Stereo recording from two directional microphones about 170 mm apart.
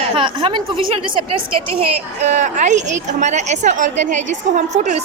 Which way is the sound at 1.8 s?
45° right (ahead or behind).